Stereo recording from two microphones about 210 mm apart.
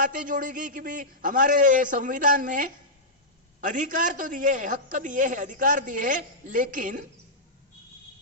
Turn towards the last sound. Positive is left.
turn(degrees=-40)  # may be behind; listen again after turning